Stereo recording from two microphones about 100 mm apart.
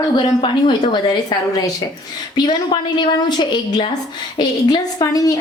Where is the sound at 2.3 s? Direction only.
45° left (ahead or behind).